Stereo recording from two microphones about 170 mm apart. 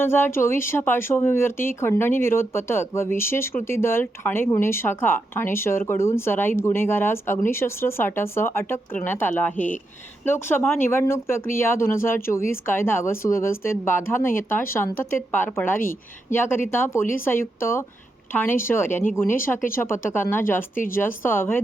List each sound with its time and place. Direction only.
0.0 s speech: 15° left (ahead or behind)
20.7 s a woman's voice: 55° left (ahead or behind)
21.0 s speech: 15° left (ahead or behind)